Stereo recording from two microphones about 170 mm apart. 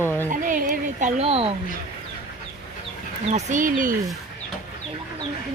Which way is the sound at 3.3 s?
50° right (ahead or behind).